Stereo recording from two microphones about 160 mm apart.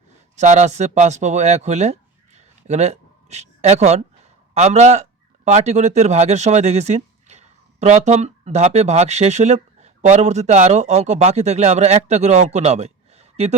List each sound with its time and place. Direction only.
0.3 s a man's voice: 45° right (ahead or behind)